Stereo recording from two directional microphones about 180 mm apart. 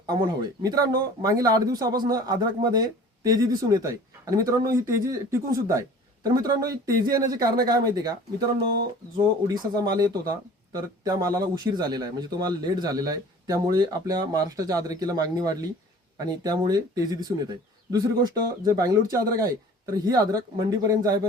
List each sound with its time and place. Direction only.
0.1 s a man's voice: 20° right (ahead or behind)
9.5 s a man's voice: 20° right (ahead or behind)